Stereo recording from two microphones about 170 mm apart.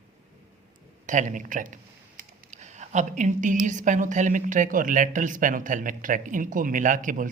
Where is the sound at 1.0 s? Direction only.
50° right (ahead or behind).